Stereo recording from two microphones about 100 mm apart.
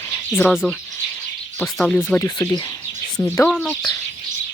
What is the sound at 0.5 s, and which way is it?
Speech, centre (ahead or behind).